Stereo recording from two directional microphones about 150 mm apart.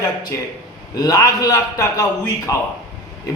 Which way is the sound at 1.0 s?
25° left (ahead or behind).